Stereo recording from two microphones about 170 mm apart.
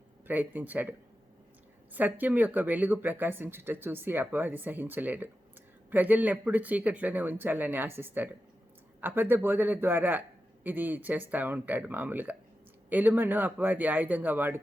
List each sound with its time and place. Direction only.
0.3 s a man's voice: 10° right (ahead or behind)